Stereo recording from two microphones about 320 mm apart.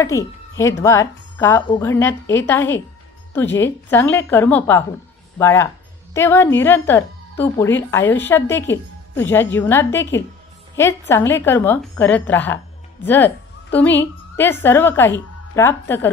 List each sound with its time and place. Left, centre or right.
0.0 s a woman's voice: centre